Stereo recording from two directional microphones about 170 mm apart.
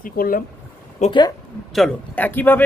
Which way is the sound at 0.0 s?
55° left (ahead or behind).